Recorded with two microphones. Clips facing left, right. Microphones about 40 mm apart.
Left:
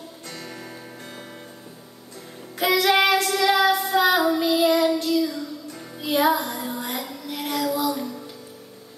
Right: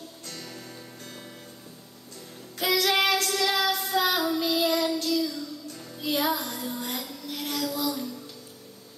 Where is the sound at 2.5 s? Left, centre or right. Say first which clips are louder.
Left 5 dB; centre.